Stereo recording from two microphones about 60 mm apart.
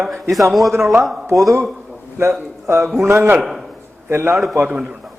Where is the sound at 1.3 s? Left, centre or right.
Right.